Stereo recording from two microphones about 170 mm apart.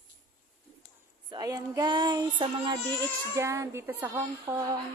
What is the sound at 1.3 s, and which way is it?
Speech, 20° right (ahead or behind).